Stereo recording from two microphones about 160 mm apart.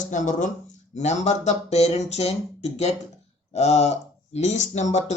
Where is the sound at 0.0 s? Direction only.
50° left (ahead or behind).